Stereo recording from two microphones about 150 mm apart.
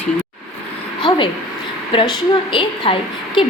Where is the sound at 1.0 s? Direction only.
30° left (ahead or behind).